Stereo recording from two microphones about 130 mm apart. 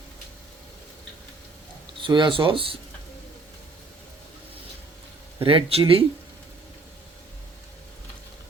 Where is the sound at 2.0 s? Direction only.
40° right (ahead or behind).